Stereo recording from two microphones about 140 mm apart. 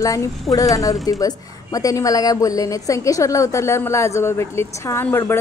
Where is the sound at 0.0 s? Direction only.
25° left (ahead or behind).